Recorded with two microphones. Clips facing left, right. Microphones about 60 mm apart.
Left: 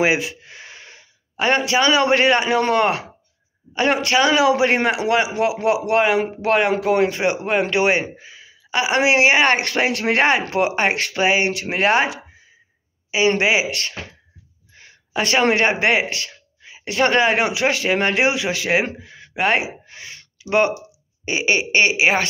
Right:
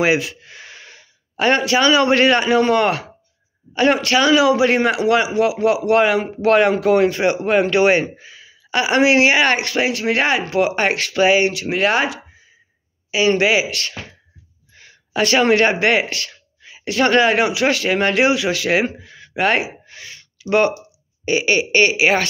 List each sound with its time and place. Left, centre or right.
0.0 s a man's voice: centre; by 10.4 s left
10.8 s speech: left
13.4 s speech: left
19.0 s gasp: centre
20.3 s speech: centre